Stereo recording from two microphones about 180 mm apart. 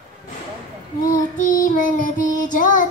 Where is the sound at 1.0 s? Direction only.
50° left (ahead or behind).